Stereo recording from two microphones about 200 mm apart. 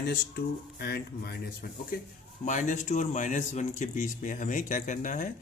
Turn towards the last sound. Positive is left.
turn(degrees=40)  # may be behind; listen again after turning